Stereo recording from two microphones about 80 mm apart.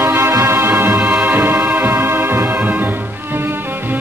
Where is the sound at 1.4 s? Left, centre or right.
Right.